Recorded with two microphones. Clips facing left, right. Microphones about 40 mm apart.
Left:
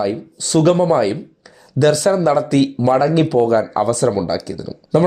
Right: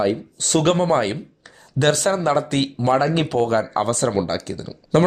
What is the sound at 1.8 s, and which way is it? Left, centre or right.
Speech, right.